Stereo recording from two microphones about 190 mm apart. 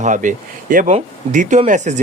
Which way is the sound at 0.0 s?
40° right (ahead or behind).